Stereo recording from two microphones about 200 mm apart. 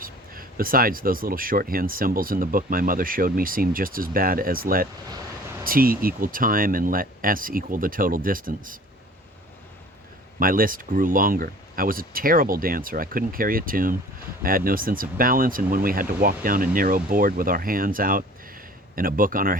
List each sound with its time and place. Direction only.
0.0 s speech: 45° right (ahead or behind)
10.4 s speech: 45° right (ahead or behind)